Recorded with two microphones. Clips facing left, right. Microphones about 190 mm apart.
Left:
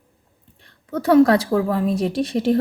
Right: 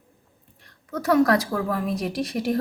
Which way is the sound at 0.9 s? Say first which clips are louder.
Left 5 dB; 30° left (ahead or behind).